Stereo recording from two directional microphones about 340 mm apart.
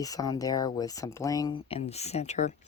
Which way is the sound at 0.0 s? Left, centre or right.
Centre.